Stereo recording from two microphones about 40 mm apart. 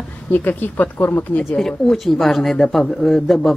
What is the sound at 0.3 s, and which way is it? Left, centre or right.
Speech, left.